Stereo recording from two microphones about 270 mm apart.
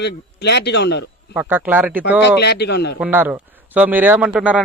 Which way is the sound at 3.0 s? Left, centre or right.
Centre.